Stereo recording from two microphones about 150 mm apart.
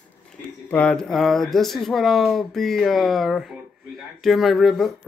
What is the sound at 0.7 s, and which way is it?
Speech, 5° left (ahead or behind).